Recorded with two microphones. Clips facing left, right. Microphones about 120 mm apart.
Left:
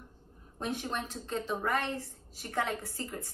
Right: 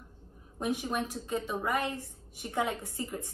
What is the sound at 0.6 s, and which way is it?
A woman's voice, 10° right (ahead or behind).